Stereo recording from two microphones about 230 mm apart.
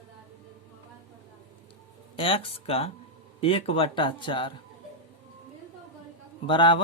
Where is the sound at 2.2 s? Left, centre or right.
Left.